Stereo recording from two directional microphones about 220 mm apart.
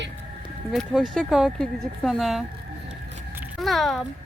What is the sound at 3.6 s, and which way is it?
Speech, centre (ahead or behind).